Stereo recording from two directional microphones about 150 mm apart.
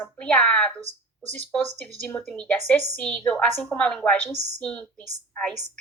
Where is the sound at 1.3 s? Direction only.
10° left (ahead or behind).